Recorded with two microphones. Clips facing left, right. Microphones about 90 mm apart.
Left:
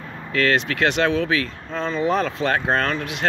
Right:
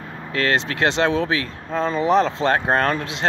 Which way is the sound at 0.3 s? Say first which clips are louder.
Left 1 dB; 25° right (ahead or behind).